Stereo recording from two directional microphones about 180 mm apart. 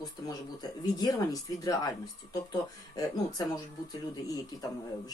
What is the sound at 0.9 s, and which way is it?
Speech, 20° left (ahead or behind).